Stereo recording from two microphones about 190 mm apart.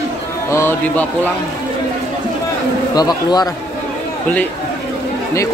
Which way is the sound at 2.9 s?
20° left (ahead or behind).